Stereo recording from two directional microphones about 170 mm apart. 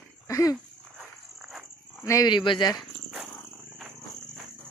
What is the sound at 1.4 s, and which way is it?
Wild animals, centre (ahead or behind).